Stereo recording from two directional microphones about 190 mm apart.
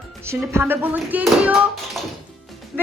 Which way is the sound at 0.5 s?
10° right (ahead or behind).